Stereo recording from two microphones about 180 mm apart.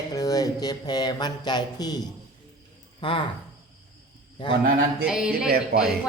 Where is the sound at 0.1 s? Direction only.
20° left (ahead or behind).